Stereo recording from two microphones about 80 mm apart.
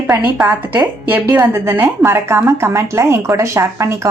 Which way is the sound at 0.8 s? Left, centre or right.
Right.